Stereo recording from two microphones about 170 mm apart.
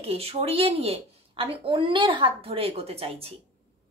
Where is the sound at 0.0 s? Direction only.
35° right (ahead or behind).